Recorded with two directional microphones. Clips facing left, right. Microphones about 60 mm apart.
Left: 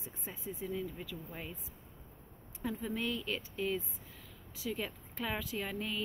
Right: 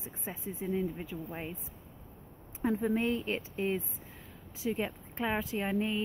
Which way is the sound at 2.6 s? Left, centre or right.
Right.